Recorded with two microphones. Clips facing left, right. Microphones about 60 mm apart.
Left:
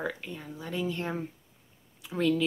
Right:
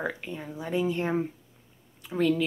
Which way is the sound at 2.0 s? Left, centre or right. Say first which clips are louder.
Right 2 dB; centre.